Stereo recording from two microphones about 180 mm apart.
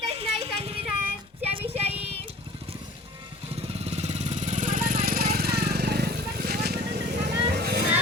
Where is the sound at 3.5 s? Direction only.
35° right (ahead or behind); by 7.8 s 65° right (ahead or behind).